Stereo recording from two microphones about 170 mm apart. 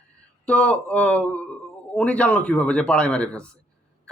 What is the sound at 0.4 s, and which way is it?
Speech, 10° left (ahead or behind).